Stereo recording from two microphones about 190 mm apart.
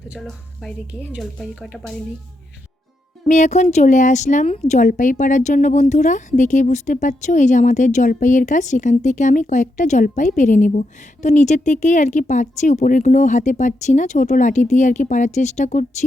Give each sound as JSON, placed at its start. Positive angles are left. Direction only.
{"t": 0.1, "sound": "a woman's voice", "side_deg": 0}
{"t": 3.2, "sound": "a woman's voice", "side_deg": 40}